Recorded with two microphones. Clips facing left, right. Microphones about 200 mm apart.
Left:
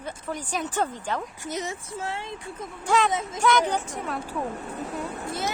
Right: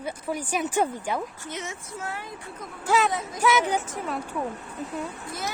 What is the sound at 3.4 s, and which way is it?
Speech, 5° right (ahead or behind).